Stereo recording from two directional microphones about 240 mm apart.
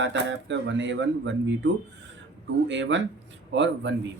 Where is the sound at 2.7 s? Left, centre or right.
Right.